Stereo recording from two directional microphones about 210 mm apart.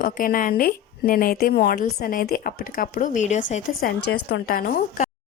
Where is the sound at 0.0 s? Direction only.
45° left (ahead or behind).